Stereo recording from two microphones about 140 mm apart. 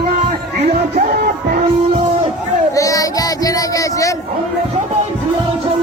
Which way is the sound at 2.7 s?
25° left (ahead or behind).